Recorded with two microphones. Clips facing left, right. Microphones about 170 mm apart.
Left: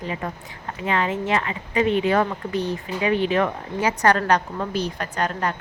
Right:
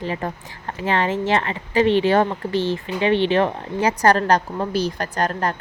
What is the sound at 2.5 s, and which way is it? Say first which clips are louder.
Speech: right 4 dB; 90° right.